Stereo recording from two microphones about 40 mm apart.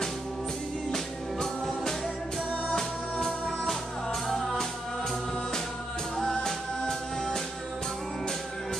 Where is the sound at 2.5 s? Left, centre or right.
Centre.